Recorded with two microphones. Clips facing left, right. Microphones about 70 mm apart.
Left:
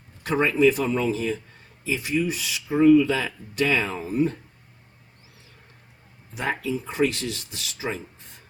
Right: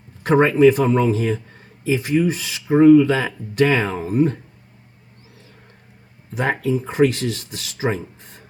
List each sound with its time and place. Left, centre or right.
0.2 s speech: right
6.3 s speech: right